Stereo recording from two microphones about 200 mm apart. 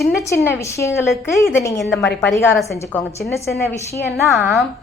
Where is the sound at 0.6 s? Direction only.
15° left (ahead or behind).